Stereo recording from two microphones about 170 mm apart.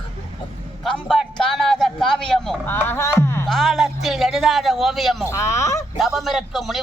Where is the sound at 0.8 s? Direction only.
5° left (ahead or behind).